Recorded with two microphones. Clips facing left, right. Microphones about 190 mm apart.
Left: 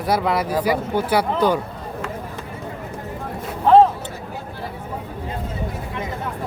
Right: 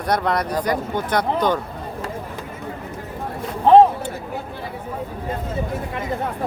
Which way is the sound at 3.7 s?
15° right (ahead or behind).